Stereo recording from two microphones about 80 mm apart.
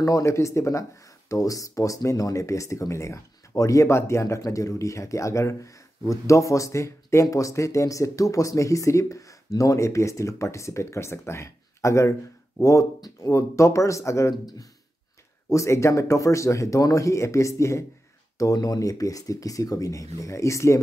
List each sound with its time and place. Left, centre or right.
0.0 s speech: left
15.5 s speech: left
18.4 s speech: left